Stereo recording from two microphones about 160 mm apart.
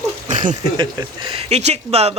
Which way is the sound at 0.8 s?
30° right (ahead or behind).